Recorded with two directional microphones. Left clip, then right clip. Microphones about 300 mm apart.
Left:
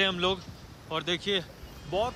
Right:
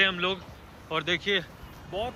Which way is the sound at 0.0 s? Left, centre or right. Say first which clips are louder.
Right 2 dB; centre.